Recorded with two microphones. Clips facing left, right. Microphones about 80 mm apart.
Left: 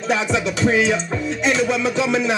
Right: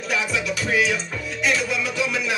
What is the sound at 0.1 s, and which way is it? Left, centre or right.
Music, left.